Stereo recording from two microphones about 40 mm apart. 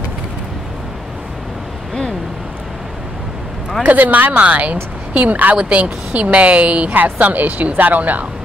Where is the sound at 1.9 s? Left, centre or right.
Centre.